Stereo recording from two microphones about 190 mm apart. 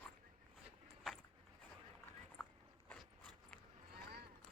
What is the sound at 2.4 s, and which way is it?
Dog, 5° left (ahead or behind).